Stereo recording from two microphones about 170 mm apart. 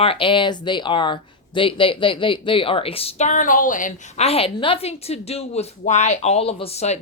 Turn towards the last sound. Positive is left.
turn(degrees=40)  # may be behind; listen again after turning